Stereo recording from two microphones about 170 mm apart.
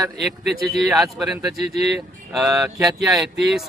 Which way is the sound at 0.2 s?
Centre (ahead or behind).